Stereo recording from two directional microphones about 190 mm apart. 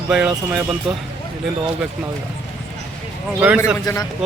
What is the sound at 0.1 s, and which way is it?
Speech, 5° right (ahead or behind).